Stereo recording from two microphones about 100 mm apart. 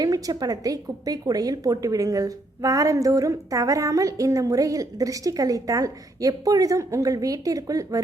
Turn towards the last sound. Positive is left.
turn(degrees=-35)  # may be behind; listen again after turning